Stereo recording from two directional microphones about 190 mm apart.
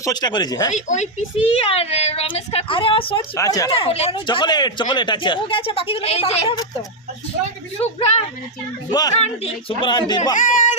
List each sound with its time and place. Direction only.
0.0 s speech: 20° left (ahead or behind)
0.7 s speech: 40° left (ahead or behind)
3.3 s speech: 15° left (ahead or behind)
3.7 s speech: 30° left (ahead or behind)
7.8 s speech: 30° left (ahead or behind)
8.9 s speech: 20° left (ahead or behind)
9.1 s speech: 35° left (ahead or behind)
10.3 s speech: 40° left (ahead or behind)